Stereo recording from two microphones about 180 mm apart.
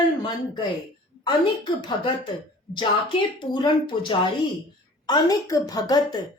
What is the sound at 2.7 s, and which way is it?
A woman's voice, 25° left (ahead or behind).